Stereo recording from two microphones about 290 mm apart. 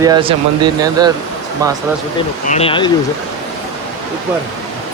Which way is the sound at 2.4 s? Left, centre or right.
Left.